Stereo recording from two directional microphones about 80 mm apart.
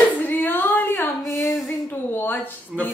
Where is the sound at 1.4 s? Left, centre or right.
Left.